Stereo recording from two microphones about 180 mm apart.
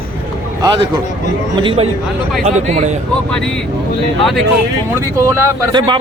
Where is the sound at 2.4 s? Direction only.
40° right (ahead or behind).